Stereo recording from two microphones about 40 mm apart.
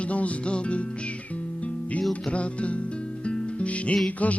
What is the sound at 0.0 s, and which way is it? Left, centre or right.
Music, left.